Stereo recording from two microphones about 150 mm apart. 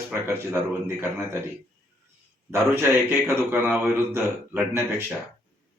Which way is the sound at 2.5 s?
15° right (ahead or behind).